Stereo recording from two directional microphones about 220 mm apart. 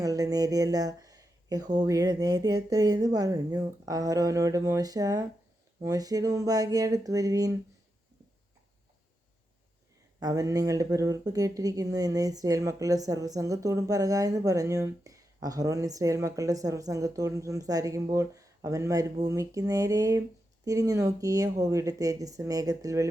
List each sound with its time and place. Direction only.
0.0 s speech: 15° right (ahead or behind)
10.2 s speech: 15° right (ahead or behind)